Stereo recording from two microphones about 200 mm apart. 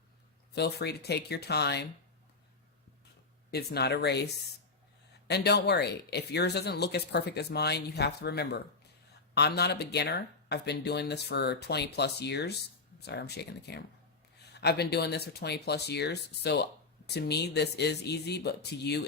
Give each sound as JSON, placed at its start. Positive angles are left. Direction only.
{"t": 0.5, "sound": "speech", "side_deg": 55}
{"t": 3.5, "sound": "speech", "side_deg": 55}
{"t": 5.3, "sound": "speech", "side_deg": 55}